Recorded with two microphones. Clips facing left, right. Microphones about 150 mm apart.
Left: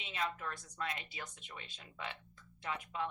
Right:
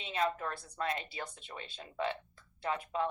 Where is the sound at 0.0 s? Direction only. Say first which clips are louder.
Right 6 dB; 35° right (ahead or behind).